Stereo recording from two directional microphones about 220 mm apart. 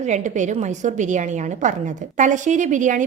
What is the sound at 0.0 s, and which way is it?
A woman's voice, 30° right (ahead or behind).